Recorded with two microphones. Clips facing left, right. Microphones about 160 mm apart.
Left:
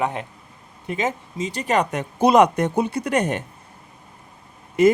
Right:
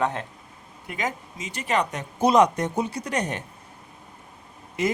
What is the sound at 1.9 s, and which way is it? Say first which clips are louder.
Speech: left 3 dB; 65° left (ahead or behind).